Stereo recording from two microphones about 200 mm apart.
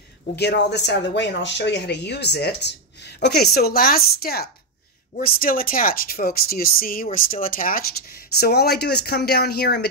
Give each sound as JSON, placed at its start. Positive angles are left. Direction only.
{"t": 0.4, "sound": "speech", "side_deg": 55}